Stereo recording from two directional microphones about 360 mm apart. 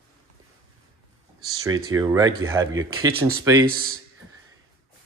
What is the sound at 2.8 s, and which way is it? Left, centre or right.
Speech, right.